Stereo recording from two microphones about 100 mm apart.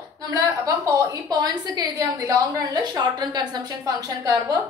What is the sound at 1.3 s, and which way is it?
A woman's voice, 45° right (ahead or behind).